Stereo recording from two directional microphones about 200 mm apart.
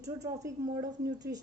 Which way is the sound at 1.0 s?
60° right (ahead or behind).